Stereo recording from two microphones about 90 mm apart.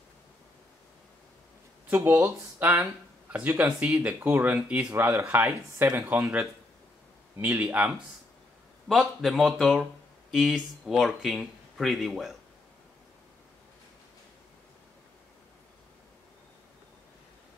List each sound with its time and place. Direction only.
2.0 s speech: 25° right (ahead or behind)
7.3 s speech: 20° right (ahead or behind)
8.8 s speech: 5° right (ahead or behind)